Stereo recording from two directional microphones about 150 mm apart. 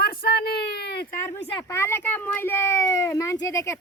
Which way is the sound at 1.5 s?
15° left (ahead or behind).